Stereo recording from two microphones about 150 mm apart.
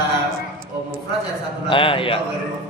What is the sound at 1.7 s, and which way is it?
Speech, 35° left (ahead or behind).